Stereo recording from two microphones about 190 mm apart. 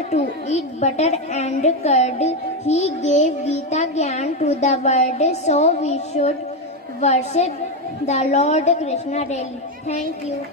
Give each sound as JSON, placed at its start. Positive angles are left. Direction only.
{"t": 0.1, "sound": "a woman's voice", "side_deg": 35}